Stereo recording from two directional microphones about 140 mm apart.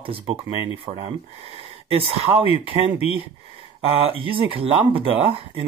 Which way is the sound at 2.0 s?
45° right (ahead or behind).